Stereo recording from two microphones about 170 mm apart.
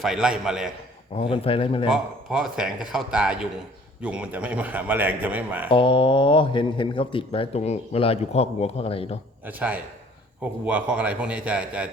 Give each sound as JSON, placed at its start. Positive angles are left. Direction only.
{"t": 0.0, "sound": "speech", "side_deg": -5}
{"t": 1.1, "sound": "speech", "side_deg": 35}
{"t": 1.9, "sound": "a man's voice", "side_deg": -5}
{"t": 5.6, "sound": "speech", "side_deg": 30}
{"t": 9.4, "sound": "a man's voice", "side_deg": -10}